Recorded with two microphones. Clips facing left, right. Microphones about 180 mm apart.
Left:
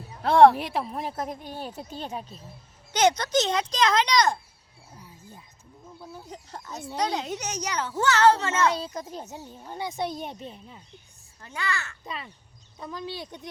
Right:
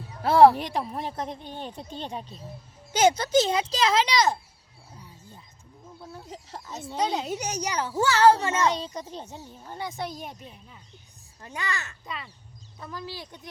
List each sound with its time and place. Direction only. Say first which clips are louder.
0.2 s a woman's voice: even; 5° right (ahead or behind)
2.9 s a child's voice: right 2 dB; 10° right (ahead or behind)
6.0 s a woman's voice: even; centre (ahead or behind); by 8.7 s 15° right (ahead or behind)
9.0 s speech: left 1 dB; 5° left (ahead or behind); by 10.8 s 30° left (ahead or behind)
11.4 s a child's voice: left 1 dB; 15° right (ahead or behind)
12.0 s speech: left 1 dB; 25° left (ahead or behind)